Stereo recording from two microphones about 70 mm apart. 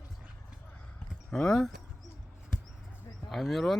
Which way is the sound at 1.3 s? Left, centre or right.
Centre.